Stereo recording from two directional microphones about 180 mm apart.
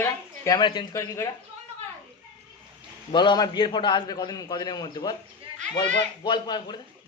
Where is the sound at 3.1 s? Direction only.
25° left (ahead or behind).